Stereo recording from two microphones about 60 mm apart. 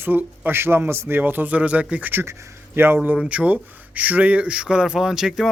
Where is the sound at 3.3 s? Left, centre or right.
Right.